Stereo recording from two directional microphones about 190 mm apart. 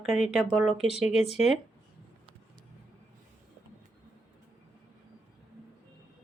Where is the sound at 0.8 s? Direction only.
35° left (ahead or behind).